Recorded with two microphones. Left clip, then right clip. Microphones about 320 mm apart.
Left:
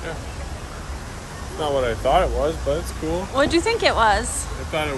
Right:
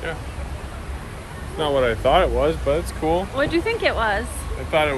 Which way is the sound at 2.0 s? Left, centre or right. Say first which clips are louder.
Even; right.